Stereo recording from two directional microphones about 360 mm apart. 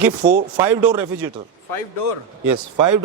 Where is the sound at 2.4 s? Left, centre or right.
Right.